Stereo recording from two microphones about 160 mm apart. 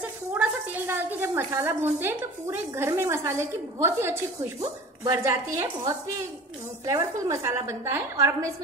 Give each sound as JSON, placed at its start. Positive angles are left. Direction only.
{"t": 0.0, "sound": "a woman's voice", "side_deg": -10}